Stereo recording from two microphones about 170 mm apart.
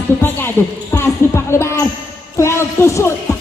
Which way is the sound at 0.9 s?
15° left (ahead or behind).